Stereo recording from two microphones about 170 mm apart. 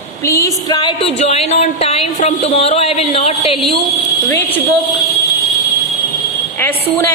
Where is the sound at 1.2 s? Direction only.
40° left (ahead or behind).